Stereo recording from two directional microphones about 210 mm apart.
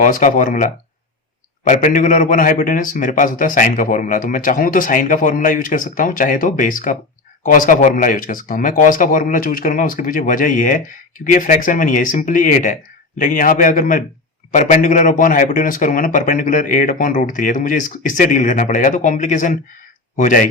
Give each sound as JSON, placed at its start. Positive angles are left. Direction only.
{"t": 0.0, "sound": "a man's voice", "side_deg": 40}